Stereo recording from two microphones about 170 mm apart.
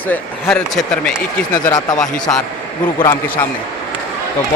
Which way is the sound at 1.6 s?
20° left (ahead or behind).